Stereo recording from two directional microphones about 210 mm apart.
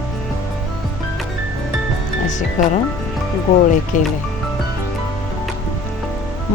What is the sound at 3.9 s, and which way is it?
Speech, 35° left (ahead or behind).